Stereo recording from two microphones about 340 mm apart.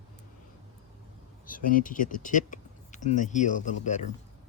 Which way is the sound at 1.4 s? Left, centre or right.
Left.